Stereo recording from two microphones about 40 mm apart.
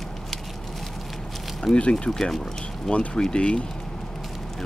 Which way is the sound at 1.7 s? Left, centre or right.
Left.